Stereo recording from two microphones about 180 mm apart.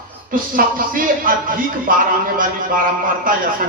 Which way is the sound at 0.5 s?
50° right (ahead or behind).